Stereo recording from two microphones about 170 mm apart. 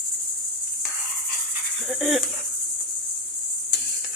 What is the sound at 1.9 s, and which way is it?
Speech, centre (ahead or behind).